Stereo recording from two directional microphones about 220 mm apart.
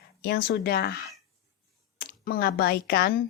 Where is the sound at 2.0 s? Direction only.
40° left (ahead or behind).